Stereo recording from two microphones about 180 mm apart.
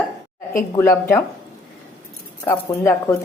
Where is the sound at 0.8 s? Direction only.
15° left (ahead or behind).